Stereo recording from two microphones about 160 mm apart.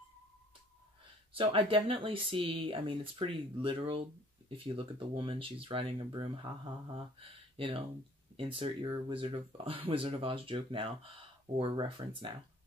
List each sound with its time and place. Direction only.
1.3 s speech: 35° right (ahead or behind)